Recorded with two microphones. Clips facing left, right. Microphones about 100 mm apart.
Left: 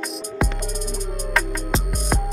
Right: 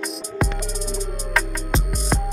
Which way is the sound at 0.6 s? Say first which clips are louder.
Right 1 dB; 50° left (ahead or behind).